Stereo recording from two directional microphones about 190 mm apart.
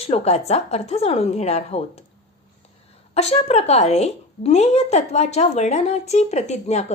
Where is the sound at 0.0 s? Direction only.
35° left (ahead or behind).